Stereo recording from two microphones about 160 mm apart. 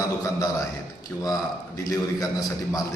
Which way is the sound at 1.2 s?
20° left (ahead or behind).